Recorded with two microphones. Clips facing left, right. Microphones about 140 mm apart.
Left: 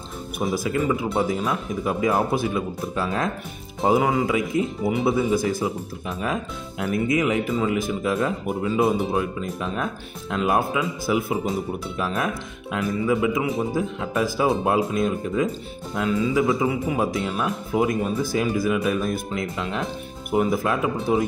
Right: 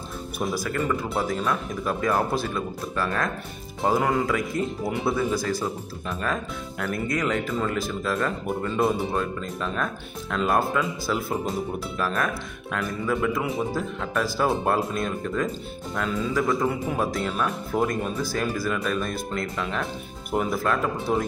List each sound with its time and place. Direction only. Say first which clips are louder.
0.7 s speech: left 3 dB; 10° left (ahead or behind)
4.0 s speech: left 2 dB; 5° left (ahead or behind)
5.3 s speech: left 4 dB; 20° left (ahead or behind); by 13.7 s centre (ahead or behind)
13.7 s speech: left 3 dB; 15° left (ahead or behind)
14.4 s speech: left 2 dB; 5° left (ahead or behind)